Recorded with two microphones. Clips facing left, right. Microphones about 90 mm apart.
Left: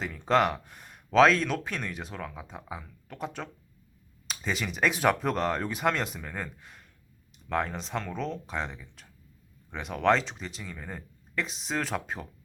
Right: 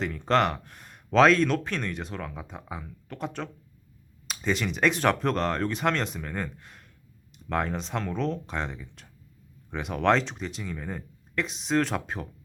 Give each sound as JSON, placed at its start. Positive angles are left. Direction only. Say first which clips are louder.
{"t": 0.0, "sound": "speech", "louder": "right 1 dB", "side_deg": 0}